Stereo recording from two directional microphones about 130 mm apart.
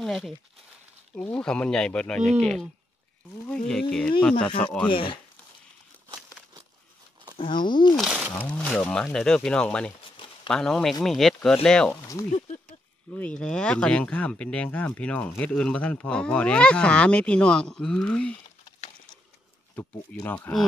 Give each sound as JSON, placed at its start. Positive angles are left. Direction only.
{"t": 0.0, "sound": "speech", "side_deg": 0}
{"t": 3.4, "sound": "speech", "side_deg": 5}
{"t": 4.8, "sound": "speech", "side_deg": 40}
{"t": 7.3, "sound": "speech", "side_deg": 40}
{"t": 7.9, "sound": "speech", "side_deg": -5}
{"t": 8.3, "sound": "speech", "side_deg": 10}
{"t": 10.1, "sound": "a sound", "side_deg": 40}
{"t": 10.5, "sound": "speech", "side_deg": 5}
{"t": 12.3, "sound": "speech", "side_deg": 65}
{"t": 13.1, "sound": "speech", "side_deg": 10}
{"t": 19.7, "sound": "speech", "side_deg": 15}